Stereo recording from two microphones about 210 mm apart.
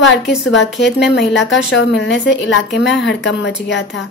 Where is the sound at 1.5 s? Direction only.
60° left (ahead or behind).